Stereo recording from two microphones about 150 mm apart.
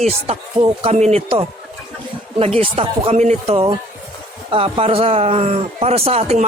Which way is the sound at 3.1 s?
50° right (ahead or behind).